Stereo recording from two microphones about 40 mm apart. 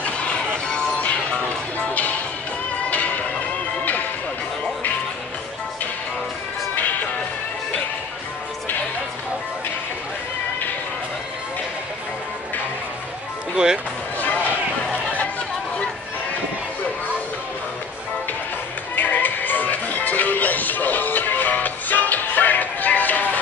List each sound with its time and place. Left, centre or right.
0.0 s music: left
2.9 s music: left
13.6 s music: right
14.2 s a sound: left
18.9 s music: left